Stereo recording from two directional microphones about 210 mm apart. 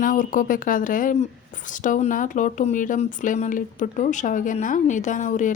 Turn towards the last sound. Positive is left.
turn(degrees=35)  # may be behind; listen again after turning